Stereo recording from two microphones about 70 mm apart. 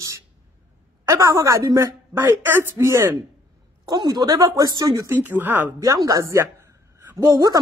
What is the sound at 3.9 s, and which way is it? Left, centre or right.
Speech, right.